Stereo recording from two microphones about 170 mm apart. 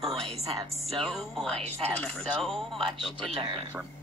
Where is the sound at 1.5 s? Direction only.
35° right (ahead or behind).